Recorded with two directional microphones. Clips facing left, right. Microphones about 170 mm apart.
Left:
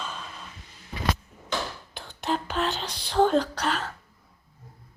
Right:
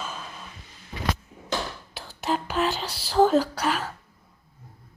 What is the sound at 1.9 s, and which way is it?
Speech, 5° right (ahead or behind).